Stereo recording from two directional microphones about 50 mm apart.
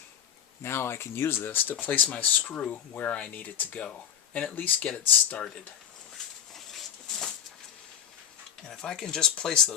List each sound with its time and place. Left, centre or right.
0.6 s speech: left
1.8 s speech: left
4.9 s speech: left
6.5 s a sound: centre
8.6 s speech: centre